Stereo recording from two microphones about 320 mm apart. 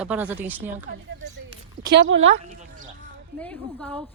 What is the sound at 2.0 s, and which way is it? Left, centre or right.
Speech, right.